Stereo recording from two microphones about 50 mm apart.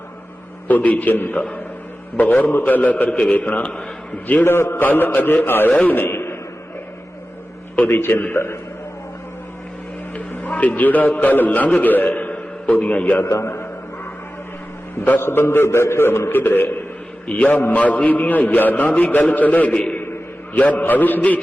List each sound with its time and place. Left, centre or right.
0.7 s a man's voice: left
4.4 s a man's voice: left
4.8 s a man's voice: left
7.9 s a man's voice: left
10.2 s a man's voice: left
13.2 s a sound: left
15.2 s a man's voice: left
16.3 s a man's voice: left
20.0 s a sound: left
20.6 s a man's voice: left